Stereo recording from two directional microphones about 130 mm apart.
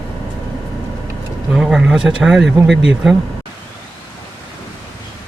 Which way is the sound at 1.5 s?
5° right (ahead or behind).